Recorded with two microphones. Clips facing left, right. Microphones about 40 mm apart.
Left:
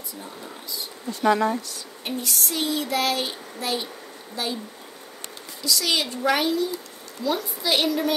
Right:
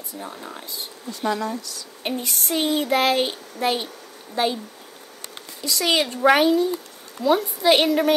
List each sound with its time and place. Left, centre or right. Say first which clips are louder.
0.2 s speech: right 5 dB; right
1.2 s speech: left 4 dB; left
2.0 s speech: right 2 dB; right
5.6 s speech: right 3 dB; right